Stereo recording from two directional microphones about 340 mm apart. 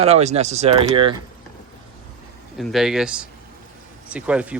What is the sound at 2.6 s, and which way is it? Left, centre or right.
Speech, centre.